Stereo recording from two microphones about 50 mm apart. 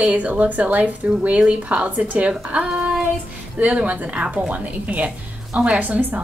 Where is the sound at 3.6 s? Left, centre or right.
Right.